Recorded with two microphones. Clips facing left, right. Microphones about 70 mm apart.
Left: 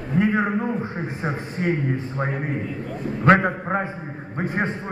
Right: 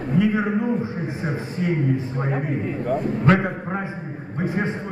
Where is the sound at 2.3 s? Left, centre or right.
Right.